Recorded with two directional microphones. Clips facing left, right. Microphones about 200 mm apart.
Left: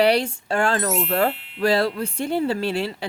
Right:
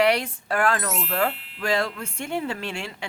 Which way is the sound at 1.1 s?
40° left (ahead or behind).